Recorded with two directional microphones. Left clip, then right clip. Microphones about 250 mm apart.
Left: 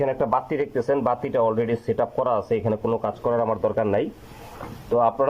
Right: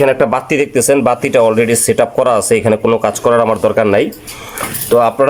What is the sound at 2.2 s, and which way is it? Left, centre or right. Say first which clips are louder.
Speech: right 11 dB; right.